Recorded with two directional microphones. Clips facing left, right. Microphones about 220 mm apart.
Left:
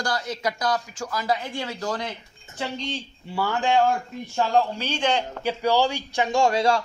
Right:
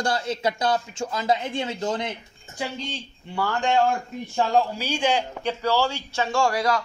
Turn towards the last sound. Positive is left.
turn(degrees=25)  # may be behind; listen again after turning